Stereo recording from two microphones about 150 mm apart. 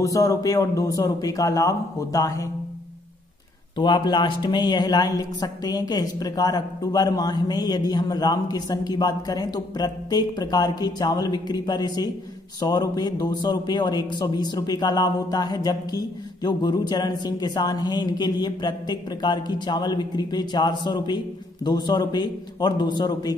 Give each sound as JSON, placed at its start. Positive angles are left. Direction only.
{"t": 0.0, "sound": "speech", "side_deg": 20}
{"t": 3.7, "sound": "speech", "side_deg": 30}